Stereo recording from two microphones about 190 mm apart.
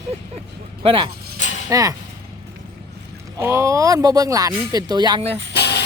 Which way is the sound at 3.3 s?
15° right (ahead or behind).